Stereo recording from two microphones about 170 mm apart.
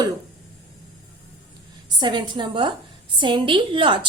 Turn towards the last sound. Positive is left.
turn(degrees=-30)  # may be behind; listen again after turning